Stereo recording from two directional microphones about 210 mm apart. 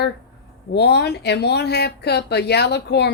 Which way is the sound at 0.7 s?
55° left (ahead or behind).